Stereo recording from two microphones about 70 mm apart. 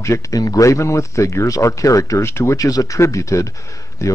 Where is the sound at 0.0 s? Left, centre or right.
Left.